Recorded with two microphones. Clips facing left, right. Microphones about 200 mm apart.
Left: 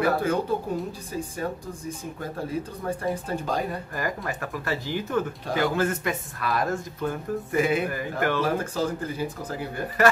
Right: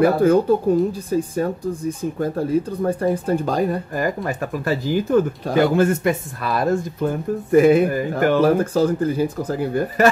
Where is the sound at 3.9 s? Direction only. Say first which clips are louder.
Right 7 dB; 25° right (ahead or behind).